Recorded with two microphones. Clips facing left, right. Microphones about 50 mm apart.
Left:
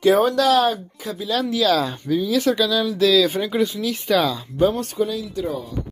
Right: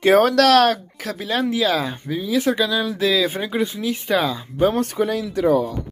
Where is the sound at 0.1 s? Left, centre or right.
Right.